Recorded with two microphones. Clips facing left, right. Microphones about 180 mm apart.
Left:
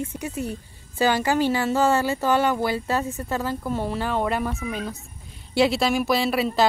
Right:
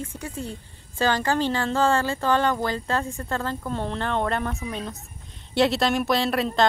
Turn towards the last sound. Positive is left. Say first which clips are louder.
# left 1 dB
turn(degrees=5)  # may be behind; listen again after turning